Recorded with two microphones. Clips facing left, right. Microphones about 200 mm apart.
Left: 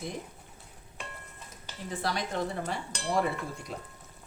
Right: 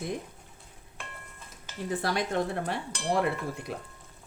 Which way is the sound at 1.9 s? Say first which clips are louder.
Right 3 dB; 55° right (ahead or behind).